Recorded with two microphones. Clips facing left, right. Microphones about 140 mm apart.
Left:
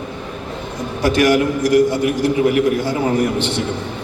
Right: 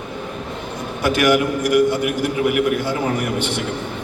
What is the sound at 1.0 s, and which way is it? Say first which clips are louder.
Speech: left 2 dB; 35° left (ahead or behind).